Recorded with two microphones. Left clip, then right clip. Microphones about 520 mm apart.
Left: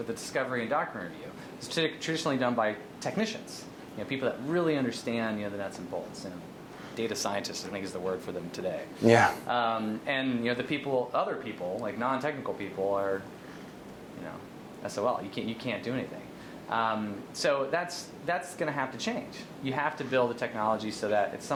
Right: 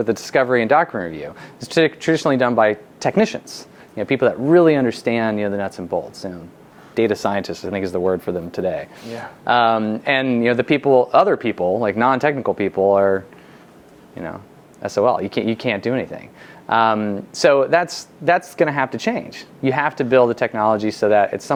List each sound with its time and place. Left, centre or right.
0.1 s speech: right
1.7 s speech: right
9.5 s speech: right
11.8 s speech: right
14.8 s speech: right